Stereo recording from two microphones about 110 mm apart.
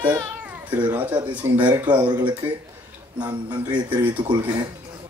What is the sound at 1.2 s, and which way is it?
Speech, 40° right (ahead or behind).